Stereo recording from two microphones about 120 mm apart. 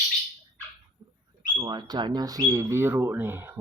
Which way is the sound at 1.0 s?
50° right (ahead or behind).